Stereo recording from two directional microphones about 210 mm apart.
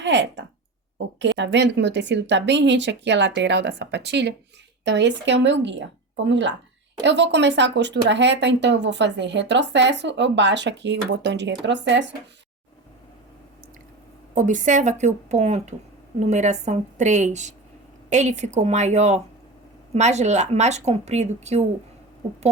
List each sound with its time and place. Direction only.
0.0 s speech: 55° right (ahead or behind)
14.3 s a woman's voice: 35° right (ahead or behind)